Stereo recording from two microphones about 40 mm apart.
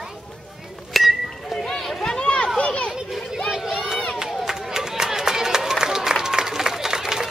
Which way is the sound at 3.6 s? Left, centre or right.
Centre.